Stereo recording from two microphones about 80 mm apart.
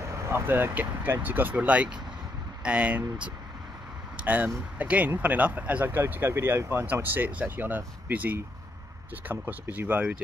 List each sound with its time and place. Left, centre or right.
0.0 s vehicle: right
0.5 s speech: right
4.2 s speech: centre